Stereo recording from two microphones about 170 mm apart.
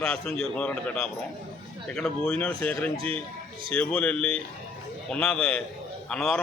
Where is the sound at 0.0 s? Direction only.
5° left (ahead or behind).